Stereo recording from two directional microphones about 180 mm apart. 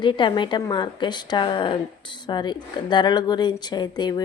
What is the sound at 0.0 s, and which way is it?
Speech, 25° left (ahead or behind).